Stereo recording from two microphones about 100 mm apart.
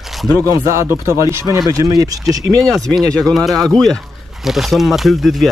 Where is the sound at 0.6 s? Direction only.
30° right (ahead or behind).